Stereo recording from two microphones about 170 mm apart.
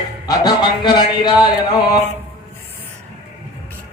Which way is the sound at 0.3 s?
25° left (ahead or behind).